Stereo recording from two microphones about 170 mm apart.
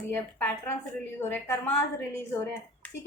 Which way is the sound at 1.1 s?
15° left (ahead or behind).